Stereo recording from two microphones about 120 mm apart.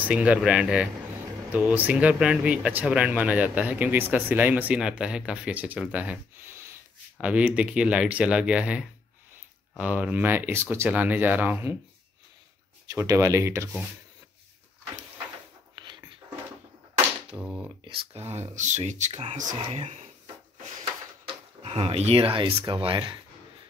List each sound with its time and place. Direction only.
0.0 s speech: 10° right (ahead or behind)
7.2 s speech: 10° right (ahead or behind)
12.8 s speech: 25° right (ahead or behind)
17.4 s speech: 10° right (ahead or behind)
17.8 s speech: 50° right (ahead or behind)
18.5 s speech: 90° right; by 20.0 s 70° right (ahead or behind)
21.6 s speech: 55° right (ahead or behind)